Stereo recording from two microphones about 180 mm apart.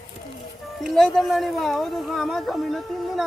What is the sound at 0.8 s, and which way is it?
Speech, centre (ahead or behind).